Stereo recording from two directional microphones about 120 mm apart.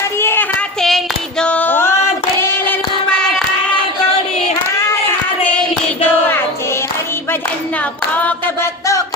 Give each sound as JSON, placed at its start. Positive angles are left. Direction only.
{"t": 0.2, "sound": "a sound", "side_deg": 20}
{"t": 0.8, "sound": "female singing", "side_deg": 5}
{"t": 2.4, "sound": "child singing", "side_deg": 15}